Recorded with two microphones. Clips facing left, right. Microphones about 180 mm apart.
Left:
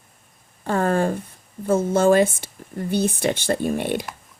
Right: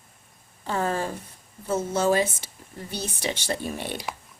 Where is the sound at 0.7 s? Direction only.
55° left (ahead or behind).